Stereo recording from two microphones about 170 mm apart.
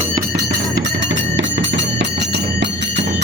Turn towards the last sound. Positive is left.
turn(degrees=-90)